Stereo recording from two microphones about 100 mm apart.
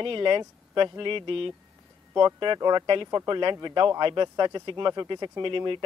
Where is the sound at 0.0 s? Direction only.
55° right (ahead or behind).